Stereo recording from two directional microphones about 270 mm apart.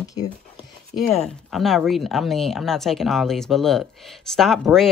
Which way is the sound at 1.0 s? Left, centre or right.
Centre.